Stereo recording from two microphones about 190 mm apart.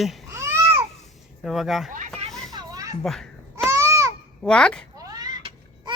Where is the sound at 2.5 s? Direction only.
20° right (ahead or behind).